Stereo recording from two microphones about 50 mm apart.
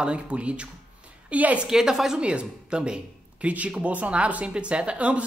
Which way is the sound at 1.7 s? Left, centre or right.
Centre.